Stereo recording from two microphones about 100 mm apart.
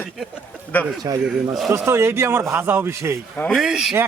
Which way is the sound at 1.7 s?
25° right (ahead or behind).